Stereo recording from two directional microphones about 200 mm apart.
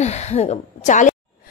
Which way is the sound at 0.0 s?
35° left (ahead or behind).